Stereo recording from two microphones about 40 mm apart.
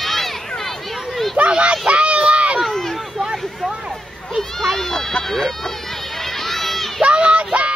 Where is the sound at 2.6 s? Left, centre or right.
Centre.